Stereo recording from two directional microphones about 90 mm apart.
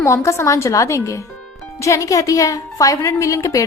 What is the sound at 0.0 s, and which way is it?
A woman's voice, 35° left (ahead or behind).